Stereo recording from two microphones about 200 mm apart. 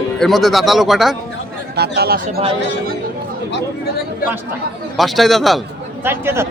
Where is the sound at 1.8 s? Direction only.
50° right (ahead or behind).